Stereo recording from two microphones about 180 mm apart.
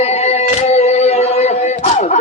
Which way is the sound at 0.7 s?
35° left (ahead or behind).